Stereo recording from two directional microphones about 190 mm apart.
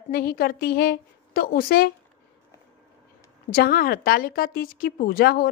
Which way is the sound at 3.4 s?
50° left (ahead or behind).